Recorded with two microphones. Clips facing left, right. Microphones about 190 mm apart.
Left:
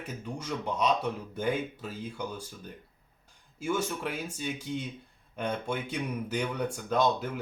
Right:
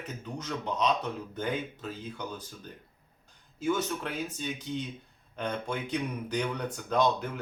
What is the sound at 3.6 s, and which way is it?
Speech, 10° left (ahead or behind).